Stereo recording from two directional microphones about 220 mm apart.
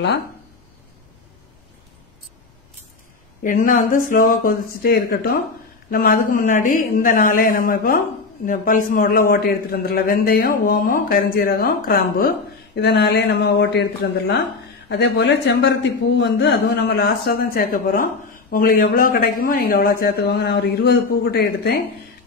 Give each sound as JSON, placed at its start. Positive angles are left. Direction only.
{"t": 3.4, "sound": "a man's voice", "side_deg": 35}